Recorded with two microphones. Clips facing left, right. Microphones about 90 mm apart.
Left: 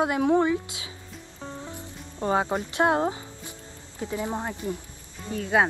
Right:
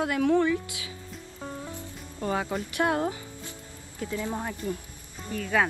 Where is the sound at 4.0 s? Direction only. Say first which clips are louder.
Left 2 dB; 20° left (ahead or behind).